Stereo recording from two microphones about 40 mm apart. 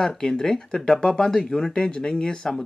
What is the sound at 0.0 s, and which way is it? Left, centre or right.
Speech, centre.